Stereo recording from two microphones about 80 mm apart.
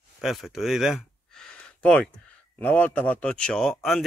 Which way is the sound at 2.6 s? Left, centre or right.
Left.